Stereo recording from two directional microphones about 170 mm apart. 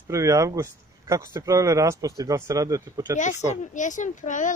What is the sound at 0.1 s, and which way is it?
Speech, 20° right (ahead or behind).